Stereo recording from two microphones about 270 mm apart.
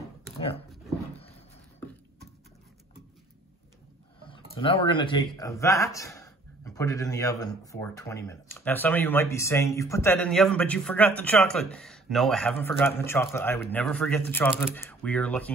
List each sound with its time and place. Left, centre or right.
0.4 s speech: left
4.3 s speech: centre